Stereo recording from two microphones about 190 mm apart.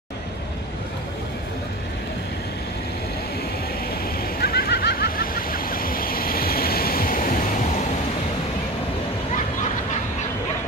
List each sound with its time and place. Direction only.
4.0 s vehicle: 50° left (ahead or behind)